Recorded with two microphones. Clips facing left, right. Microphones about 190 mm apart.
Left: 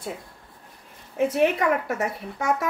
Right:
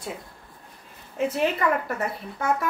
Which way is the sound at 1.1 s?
70° left (ahead or behind).